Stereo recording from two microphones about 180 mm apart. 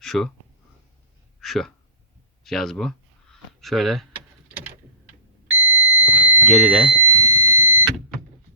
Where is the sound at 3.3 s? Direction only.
Centre (ahead or behind).